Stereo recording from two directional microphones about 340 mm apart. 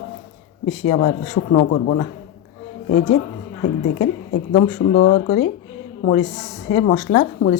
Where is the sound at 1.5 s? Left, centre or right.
Left.